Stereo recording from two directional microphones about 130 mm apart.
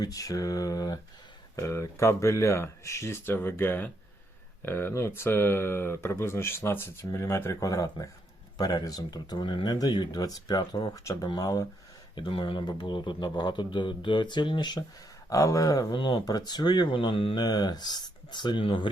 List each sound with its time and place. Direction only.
0.0 s speech: 30° left (ahead or behind)
12.1 s speech: 35° left (ahead or behind)